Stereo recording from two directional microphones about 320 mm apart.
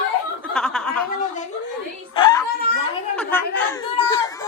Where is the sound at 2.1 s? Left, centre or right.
Centre.